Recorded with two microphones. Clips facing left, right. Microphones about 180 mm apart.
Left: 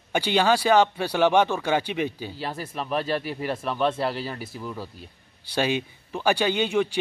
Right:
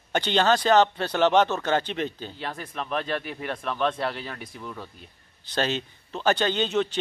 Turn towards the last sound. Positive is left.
turn(degrees=10)  # may be behind; listen again after turning